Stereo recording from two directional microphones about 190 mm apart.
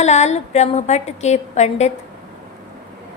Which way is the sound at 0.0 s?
35° left (ahead or behind).